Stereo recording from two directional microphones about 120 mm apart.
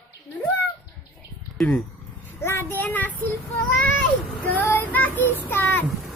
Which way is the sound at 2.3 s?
20° left (ahead or behind).